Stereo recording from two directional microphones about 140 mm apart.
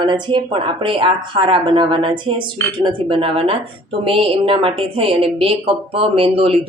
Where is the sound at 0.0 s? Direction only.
35° right (ahead or behind).